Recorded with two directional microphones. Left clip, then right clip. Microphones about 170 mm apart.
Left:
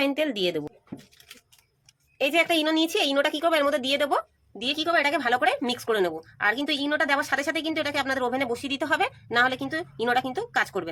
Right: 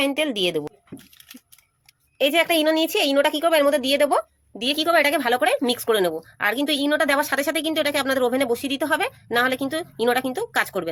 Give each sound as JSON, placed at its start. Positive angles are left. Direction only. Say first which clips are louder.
{"t": 0.0, "sound": "a woman's voice", "louder": "right 3 dB", "side_deg": -30}
{"t": 2.1, "sound": "a woman's voice", "louder": "right 4 dB", "side_deg": -35}